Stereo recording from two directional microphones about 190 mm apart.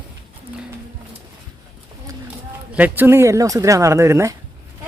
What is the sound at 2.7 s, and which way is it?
Speech, 10° right (ahead or behind).